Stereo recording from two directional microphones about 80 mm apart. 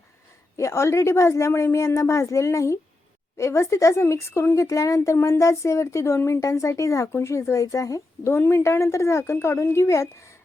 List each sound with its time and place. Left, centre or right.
0.5 s speech: left